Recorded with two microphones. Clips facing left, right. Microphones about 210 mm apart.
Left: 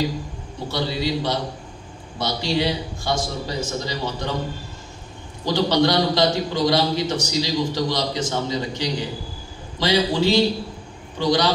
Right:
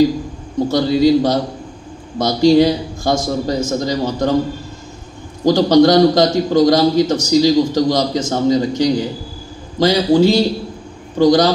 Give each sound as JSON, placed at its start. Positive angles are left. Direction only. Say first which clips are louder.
{"t": 0.7, "sound": "a man's voice", "louder": "right 11 dB", "side_deg": -45}
{"t": 5.4, "sound": "a man's voice", "louder": "right 9 dB", "side_deg": -45}